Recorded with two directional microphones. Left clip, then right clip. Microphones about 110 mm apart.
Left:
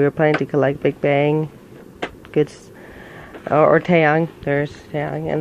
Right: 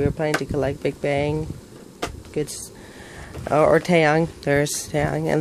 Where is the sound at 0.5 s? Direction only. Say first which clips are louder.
Left 6 dB; 25° left (ahead or behind).